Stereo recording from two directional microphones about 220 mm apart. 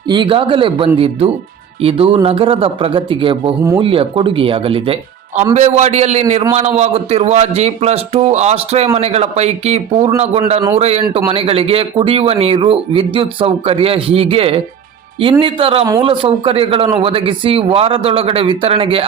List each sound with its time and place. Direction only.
0.1 s a man's voice: 20° right (ahead or behind)